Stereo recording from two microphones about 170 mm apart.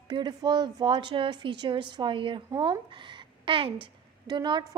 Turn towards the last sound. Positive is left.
turn(degrees=-25)  # may be behind; listen again after turning